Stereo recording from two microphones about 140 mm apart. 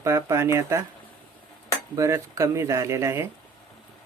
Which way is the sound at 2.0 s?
20° right (ahead or behind).